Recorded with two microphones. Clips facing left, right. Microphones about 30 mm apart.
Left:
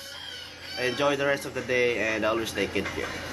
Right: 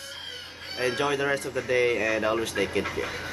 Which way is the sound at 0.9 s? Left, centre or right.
Centre.